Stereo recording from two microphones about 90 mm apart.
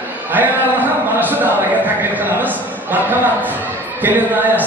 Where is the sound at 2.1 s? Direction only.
20° right (ahead or behind).